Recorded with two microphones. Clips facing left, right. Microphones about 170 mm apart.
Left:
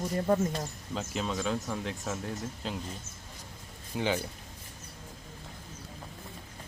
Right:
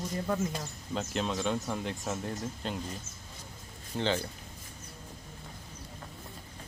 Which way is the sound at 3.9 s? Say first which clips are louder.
Even; 10° left (ahead or behind).